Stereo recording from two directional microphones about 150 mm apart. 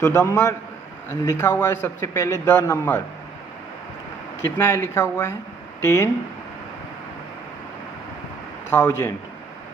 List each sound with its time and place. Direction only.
0.0 s a man's voice: 20° left (ahead or behind)
4.5 s speech: 15° left (ahead or behind)
8.7 s speech: 20° left (ahead or behind)